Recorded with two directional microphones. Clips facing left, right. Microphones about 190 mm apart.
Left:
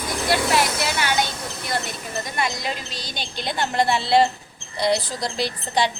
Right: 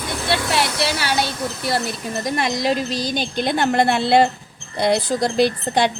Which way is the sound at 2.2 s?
35° right (ahead or behind).